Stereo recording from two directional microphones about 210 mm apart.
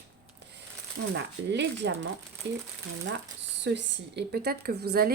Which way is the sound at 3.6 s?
55° right (ahead or behind).